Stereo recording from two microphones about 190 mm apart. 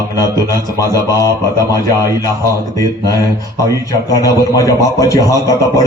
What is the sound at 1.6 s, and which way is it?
A man's voice, 20° left (ahead or behind).